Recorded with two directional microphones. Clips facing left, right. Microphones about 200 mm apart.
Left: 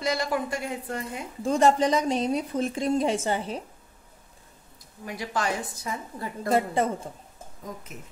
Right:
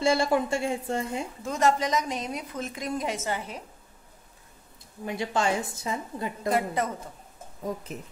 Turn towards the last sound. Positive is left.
turn(degrees=-35)  # may be behind; listen again after turning